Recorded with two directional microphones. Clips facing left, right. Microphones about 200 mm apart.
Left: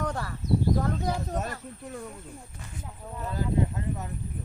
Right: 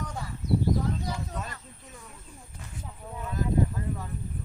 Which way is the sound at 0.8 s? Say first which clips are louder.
Left 3 dB; 55° left (ahead or behind).